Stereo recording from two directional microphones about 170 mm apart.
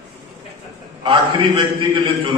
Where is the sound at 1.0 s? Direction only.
30° right (ahead or behind).